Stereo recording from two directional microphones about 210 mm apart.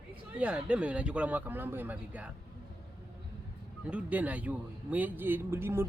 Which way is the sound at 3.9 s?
5° right (ahead or behind).